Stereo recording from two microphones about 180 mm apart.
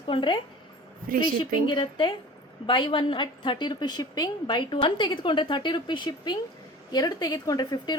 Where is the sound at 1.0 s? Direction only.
50° right (ahead or behind).